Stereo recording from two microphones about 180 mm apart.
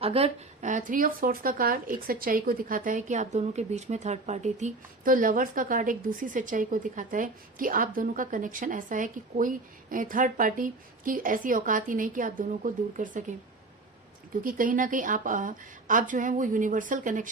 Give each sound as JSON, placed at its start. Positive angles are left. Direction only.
{"t": 0.0, "sound": "speech", "side_deg": -35}
{"t": 14.4, "sound": "speech", "side_deg": -50}